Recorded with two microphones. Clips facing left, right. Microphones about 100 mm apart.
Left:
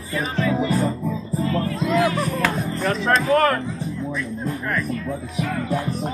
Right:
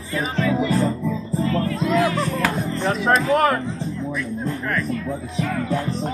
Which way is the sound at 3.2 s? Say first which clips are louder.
Left 3 dB; 30° right (ahead or behind).